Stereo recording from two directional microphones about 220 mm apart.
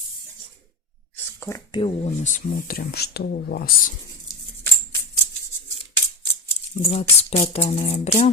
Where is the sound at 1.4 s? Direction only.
15° left (ahead or behind).